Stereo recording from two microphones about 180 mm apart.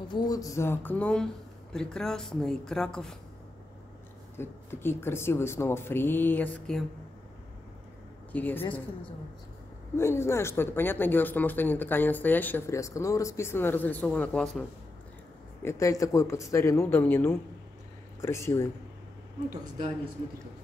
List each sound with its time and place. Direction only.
0.1 s speech: 20° left (ahead or behind); by 3.2 s 5° left (ahead or behind)
4.4 s speech: 15° left (ahead or behind)
8.3 s speech: 10° left (ahead or behind)
9.9 s speech: 15° left (ahead or behind)
15.6 s speech: 15° left (ahead or behind)